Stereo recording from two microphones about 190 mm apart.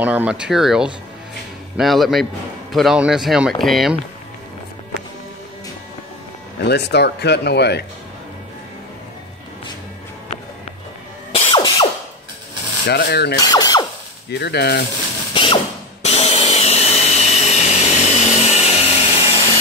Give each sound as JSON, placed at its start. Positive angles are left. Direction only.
{"t": 0.0, "sound": "speech", "side_deg": -5}
{"t": 6.6, "sound": "speech", "side_deg": 60}
{"t": 11.5, "sound": "ratchet", "side_deg": 25}
{"t": 12.8, "sound": "speech", "side_deg": 60}
{"t": 13.4, "sound": "mechanisms", "side_deg": 20}
{"t": 14.3, "sound": "speech", "side_deg": 60}
{"t": 15.3, "sound": "power tool", "side_deg": 30}